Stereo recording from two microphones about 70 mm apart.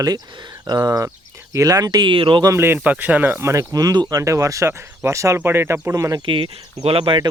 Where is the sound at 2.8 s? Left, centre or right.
Right.